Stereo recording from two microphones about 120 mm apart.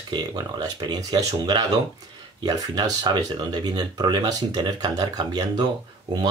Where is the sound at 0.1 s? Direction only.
35° right (ahead or behind).